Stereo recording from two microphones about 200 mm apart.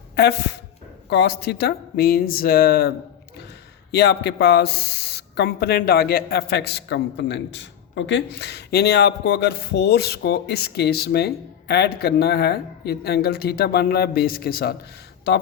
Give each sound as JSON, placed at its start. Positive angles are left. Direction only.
{"t": 0.2, "sound": "speech", "side_deg": 55}
{"t": 3.9, "sound": "speech", "side_deg": 55}